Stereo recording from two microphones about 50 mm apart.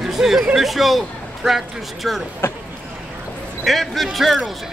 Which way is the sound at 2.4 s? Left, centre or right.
Left.